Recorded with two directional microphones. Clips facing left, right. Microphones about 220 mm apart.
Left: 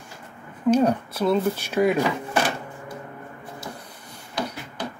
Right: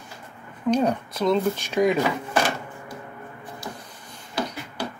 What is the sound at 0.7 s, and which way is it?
Speech, 10° left (ahead or behind).